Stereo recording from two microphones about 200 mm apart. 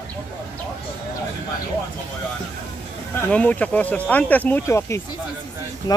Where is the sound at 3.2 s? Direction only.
5° left (ahead or behind).